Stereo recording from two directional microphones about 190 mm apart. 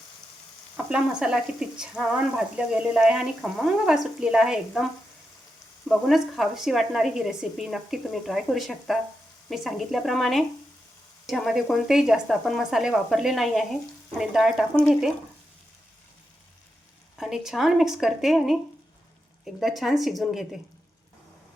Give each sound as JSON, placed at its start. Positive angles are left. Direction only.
{"t": 0.9, "sound": "a woman's voice", "side_deg": -5}
{"t": 5.9, "sound": "a woman's voice", "side_deg": 0}
{"t": 17.2, "sound": "a woman's voice", "side_deg": 0}